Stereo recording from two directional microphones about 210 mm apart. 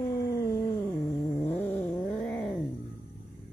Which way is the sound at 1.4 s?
10° left (ahead or behind).